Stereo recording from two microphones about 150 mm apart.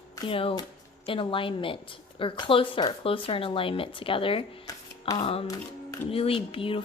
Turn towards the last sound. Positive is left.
turn(degrees=35)  # may be behind; listen again after turning